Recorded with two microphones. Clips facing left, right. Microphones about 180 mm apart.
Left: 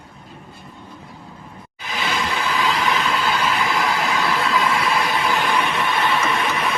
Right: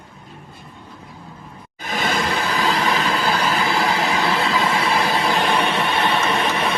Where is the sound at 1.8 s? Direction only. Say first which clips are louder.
Right 3 dB; 45° right (ahead or behind).